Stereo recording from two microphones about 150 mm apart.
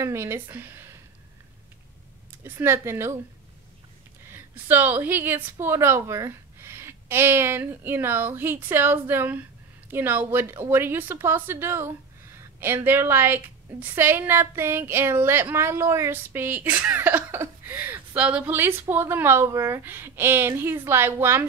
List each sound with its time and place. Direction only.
0.0 s speech: 20° right (ahead or behind)
2.4 s a woman's voice: 15° right (ahead or behind)
4.3 s a woman's voice: 15° right (ahead or behind)